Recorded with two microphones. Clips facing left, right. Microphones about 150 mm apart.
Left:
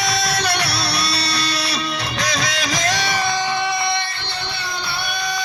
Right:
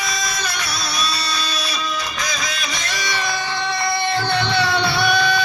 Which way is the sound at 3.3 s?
15° left (ahead or behind).